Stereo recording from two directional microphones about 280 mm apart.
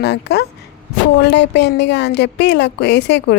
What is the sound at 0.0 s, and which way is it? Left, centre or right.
A woman's voice, left.